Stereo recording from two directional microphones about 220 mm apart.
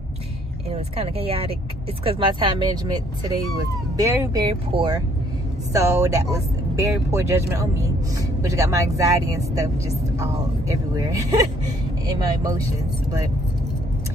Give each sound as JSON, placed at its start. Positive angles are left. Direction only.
{"t": 0.7, "sound": "speech", "side_deg": -30}
{"t": 5.7, "sound": "speech", "side_deg": -15}